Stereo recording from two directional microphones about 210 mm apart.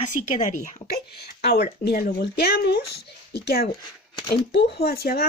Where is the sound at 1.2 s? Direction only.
50° left (ahead or behind).